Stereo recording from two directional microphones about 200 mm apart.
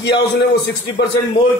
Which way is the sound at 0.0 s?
55° left (ahead or behind).